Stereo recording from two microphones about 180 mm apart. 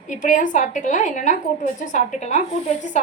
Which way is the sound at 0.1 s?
45° left (ahead or behind).